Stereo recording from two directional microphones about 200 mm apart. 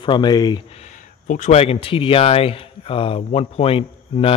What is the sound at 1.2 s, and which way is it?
Speech, 35° left (ahead or behind).